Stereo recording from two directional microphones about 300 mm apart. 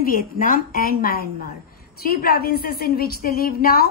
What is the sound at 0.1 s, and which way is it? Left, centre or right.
A woman's voice, left.